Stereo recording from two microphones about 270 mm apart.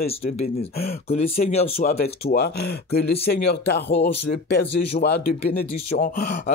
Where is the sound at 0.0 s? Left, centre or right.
Left.